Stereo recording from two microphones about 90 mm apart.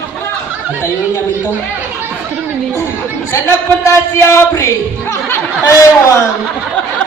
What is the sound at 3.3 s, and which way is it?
Speech, 30° left (ahead or behind).